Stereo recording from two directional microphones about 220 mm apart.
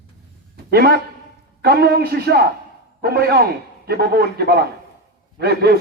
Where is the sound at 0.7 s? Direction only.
45° right (ahead or behind).